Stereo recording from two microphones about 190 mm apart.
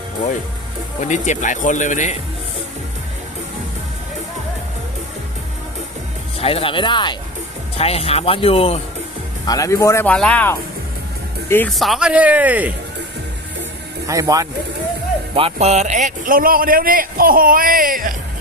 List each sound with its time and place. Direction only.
1.0 s speech: 40° left (ahead or behind)
6.4 s speech: 30° left (ahead or behind)
9.5 s speech: 15° left (ahead or behind)
11.7 s speech: centre (ahead or behind)
14.1 s speech: 15° right (ahead or behind)
15.4 s a man's voice: 35° right (ahead or behind)